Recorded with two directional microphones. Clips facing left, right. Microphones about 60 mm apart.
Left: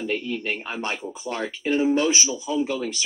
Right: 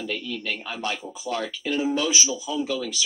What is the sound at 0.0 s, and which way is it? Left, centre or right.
Speech, left.